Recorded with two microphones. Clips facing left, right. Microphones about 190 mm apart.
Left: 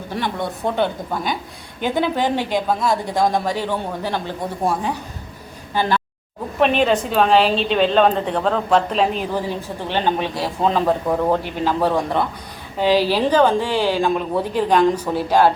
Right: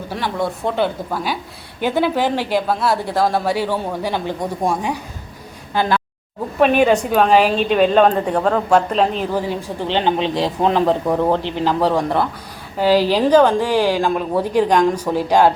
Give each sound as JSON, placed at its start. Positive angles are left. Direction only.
{"t": 0.2, "sound": "a woman's voice", "side_deg": 0}
{"t": 6.6, "sound": "a woman's voice", "side_deg": -10}
{"t": 9.3, "sound": "a woman's voice", "side_deg": -15}